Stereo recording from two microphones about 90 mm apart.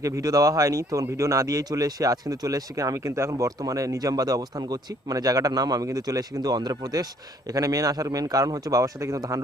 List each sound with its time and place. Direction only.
0.0 s speech: 40° right (ahead or behind)